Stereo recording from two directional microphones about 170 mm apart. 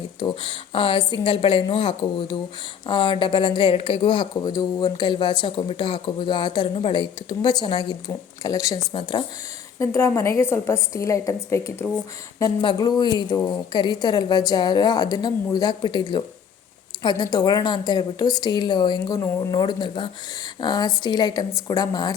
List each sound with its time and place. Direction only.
0.2 s a woman's voice: 30° left (ahead or behind)